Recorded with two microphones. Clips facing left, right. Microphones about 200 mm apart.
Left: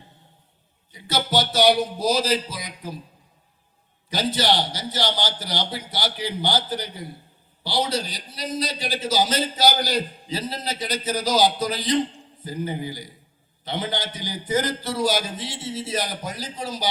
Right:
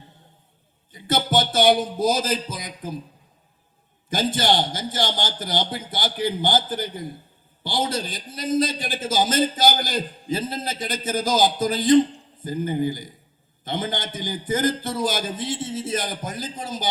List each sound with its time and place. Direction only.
0.9 s a man's voice: 50° right (ahead or behind)
4.1 s a man's voice: 50° right (ahead or behind)